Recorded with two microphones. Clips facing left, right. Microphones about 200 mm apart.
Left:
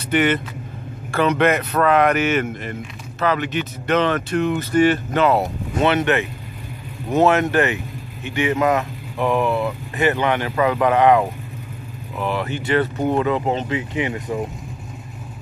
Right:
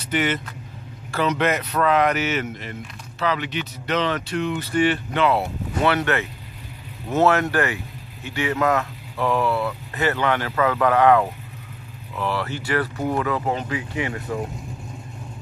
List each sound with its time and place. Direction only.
0.0 s speech: 55° left (ahead or behind)
5.9 s speech: 20° left (ahead or behind)